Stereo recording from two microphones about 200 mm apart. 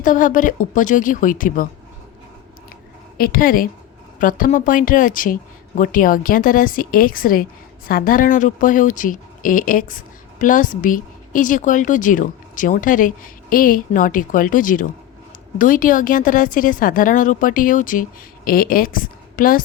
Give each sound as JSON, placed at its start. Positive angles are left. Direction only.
{"t": 0.0, "sound": "speech", "side_deg": 40}
{"t": 3.2, "sound": "a woman's voice", "side_deg": 45}